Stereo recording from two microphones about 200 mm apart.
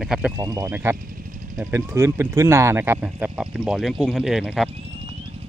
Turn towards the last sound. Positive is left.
turn(degrees=0)  # may be behind; listen again after turning